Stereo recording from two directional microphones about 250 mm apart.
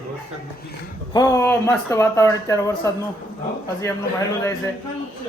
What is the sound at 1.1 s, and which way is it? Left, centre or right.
Speech, centre.